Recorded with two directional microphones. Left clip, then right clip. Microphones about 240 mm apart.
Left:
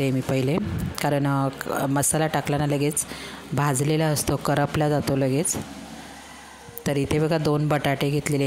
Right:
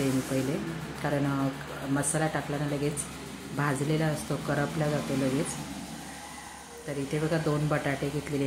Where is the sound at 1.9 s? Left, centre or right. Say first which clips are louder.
Left 2 dB; left.